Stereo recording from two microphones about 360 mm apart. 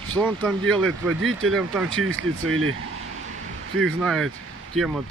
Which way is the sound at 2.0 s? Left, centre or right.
Right.